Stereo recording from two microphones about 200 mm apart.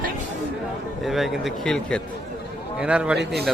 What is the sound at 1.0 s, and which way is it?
Speech, centre (ahead or behind).